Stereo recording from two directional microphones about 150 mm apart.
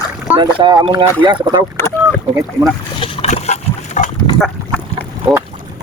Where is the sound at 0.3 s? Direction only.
30° right (ahead or behind).